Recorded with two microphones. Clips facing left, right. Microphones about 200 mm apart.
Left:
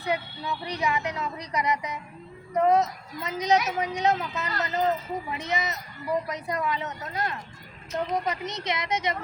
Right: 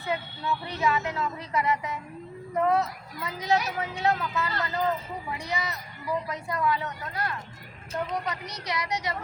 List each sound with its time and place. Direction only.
0.0 s a woman's voice: 15° left (ahead or behind)